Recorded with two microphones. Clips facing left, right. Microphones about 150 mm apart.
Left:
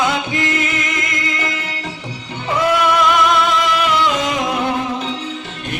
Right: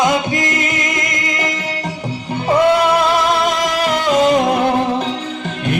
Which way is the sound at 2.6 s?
35° right (ahead or behind).